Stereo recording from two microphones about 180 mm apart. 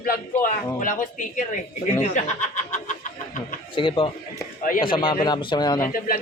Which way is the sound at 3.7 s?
30° left (ahead or behind).